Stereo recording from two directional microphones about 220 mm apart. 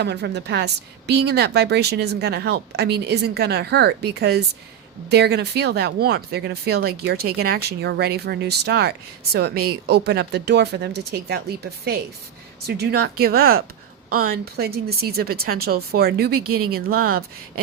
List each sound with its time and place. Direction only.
0.0 s speech: 50° right (ahead or behind)
16.4 s speech: 90° right
16.6 s speech: 45° right (ahead or behind)